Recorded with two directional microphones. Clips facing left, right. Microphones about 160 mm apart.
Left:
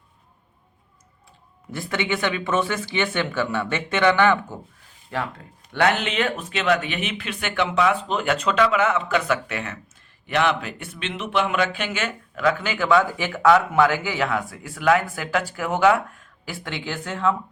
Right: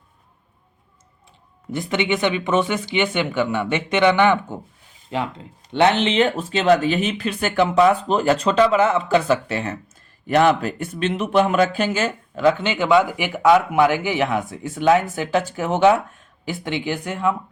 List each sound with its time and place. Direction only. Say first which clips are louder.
1.7 s speech: right 4 dB; 20° right (ahead or behind)